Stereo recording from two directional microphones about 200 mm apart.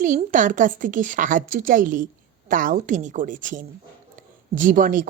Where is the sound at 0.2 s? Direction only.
40° right (ahead or behind).